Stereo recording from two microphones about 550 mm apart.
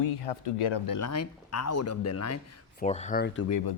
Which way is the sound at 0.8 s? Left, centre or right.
Left.